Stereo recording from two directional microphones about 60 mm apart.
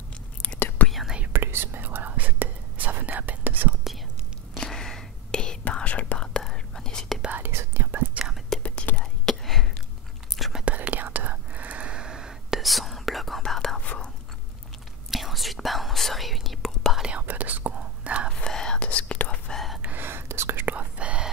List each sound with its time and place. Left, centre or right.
0.6 s whispering: left
0.8 s whispering: centre
1.3 s whispering: right
4.6 s whispering: centre
7.3 s whispering: right
8.5 s whispering: centre
10.6 s whispering: right; by 13.4 s centre
13.9 s whispering: left
15.0 s whispering: centre
17.1 s whispering: right
18.4 s whispering: centre
19.5 s whispering: centre
19.8 s whispering: right
20.6 s whispering: right